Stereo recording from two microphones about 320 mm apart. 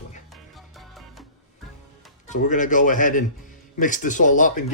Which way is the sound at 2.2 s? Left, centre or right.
Left.